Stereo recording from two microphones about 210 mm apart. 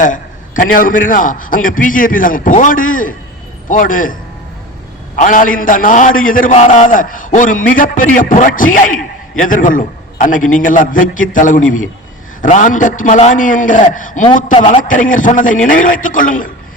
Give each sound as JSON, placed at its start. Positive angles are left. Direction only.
{"t": 0.0, "sound": "a man's voice", "side_deg": 40}
{"t": 5.1, "sound": "a man's voice", "side_deg": 35}